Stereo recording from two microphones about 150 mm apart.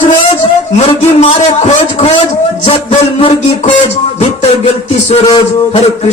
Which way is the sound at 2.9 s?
45° left (ahead or behind).